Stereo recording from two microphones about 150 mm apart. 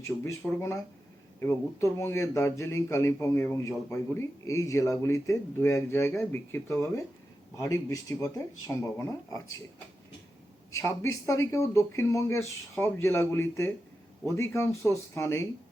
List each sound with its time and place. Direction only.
0.0 s a man's voice: 15° left (ahead or behind)
10.8 s a man's voice: 20° left (ahead or behind)